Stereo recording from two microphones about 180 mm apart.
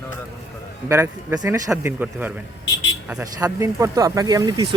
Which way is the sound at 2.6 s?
90° left.